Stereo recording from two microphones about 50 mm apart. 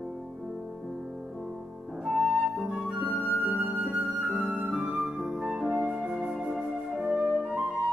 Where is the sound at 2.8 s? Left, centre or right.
Centre.